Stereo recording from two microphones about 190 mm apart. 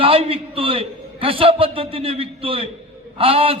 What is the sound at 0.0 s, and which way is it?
A man's voice, 30° right (ahead or behind).